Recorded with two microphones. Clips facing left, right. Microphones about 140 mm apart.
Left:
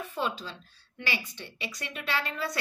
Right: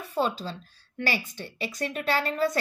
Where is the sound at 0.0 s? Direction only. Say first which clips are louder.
Right 5 dB; 40° right (ahead or behind).